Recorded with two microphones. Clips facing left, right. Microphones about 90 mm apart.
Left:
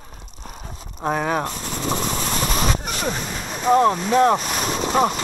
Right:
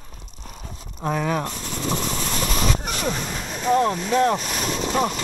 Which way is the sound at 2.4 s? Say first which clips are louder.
Left 1 dB; 35° left (ahead or behind).